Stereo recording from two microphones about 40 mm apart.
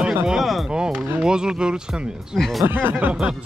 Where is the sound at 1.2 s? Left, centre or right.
Centre.